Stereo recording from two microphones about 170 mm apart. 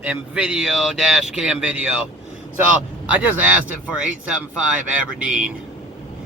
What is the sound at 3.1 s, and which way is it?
Speech, 10° right (ahead or behind).